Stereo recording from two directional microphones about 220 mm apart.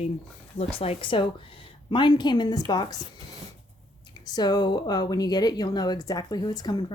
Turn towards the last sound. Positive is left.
turn(degrees=20)  # may be behind; listen again after turning